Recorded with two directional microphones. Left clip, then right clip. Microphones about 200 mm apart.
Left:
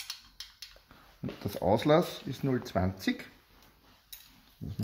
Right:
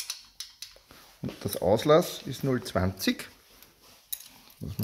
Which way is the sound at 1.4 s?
15° right (ahead or behind).